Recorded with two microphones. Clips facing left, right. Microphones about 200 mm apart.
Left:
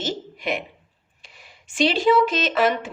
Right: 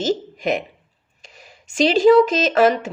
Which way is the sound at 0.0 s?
45° right (ahead or behind).